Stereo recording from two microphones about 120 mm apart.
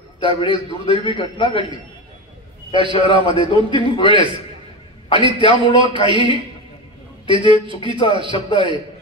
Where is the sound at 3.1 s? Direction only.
45° right (ahead or behind).